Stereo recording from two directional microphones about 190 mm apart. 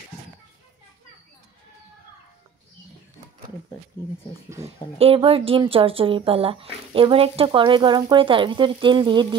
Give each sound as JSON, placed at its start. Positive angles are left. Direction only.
{"t": 4.9, "sound": "speech", "side_deg": -30}